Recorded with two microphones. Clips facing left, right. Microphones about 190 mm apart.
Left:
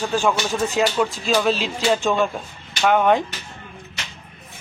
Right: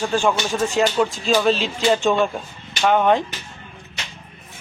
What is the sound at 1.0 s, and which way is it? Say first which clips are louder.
Speech: right 1 dB; centre (ahead or behind).